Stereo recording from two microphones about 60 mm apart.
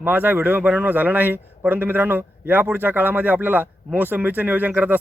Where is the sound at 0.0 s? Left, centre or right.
Right.